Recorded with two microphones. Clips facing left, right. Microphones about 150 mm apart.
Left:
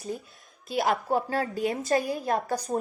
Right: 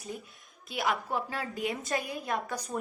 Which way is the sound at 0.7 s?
35° left (ahead or behind).